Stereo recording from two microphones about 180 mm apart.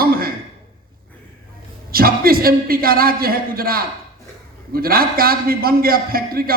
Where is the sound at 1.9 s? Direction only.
55° right (ahead or behind).